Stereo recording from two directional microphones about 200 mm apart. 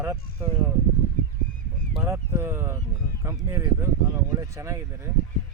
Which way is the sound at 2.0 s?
10° right (ahead or behind).